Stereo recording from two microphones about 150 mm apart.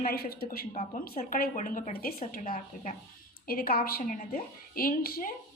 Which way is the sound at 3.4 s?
85° left.